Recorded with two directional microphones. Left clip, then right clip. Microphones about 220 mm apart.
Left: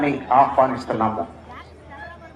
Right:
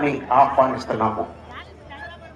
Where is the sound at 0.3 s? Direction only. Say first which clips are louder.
Even; 25° left (ahead or behind).